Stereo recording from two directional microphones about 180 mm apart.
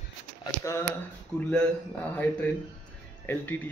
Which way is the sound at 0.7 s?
15° left (ahead or behind).